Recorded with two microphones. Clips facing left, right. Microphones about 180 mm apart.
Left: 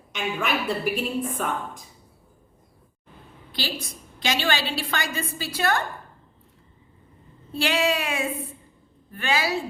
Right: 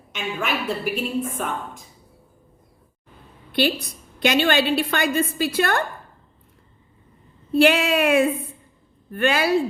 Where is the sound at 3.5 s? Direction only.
60° right (ahead or behind).